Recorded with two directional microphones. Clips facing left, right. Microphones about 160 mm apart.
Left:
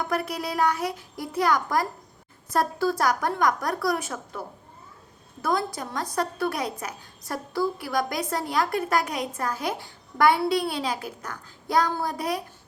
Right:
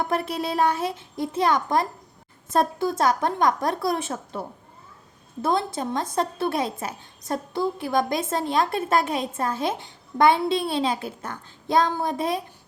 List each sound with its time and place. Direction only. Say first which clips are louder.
0.0 s a woman's voice: right 2 dB; 25° right (ahead or behind)